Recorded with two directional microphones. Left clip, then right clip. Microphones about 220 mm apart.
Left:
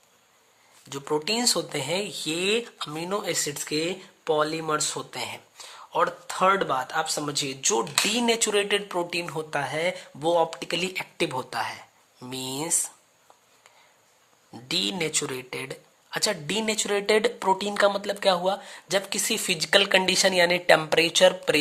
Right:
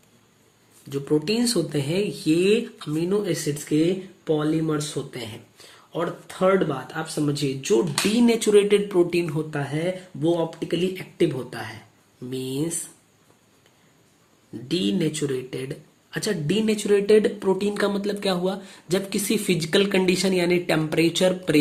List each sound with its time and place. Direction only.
0.9 s speech: 35° left (ahead or behind)
14.7 s speech: 35° left (ahead or behind)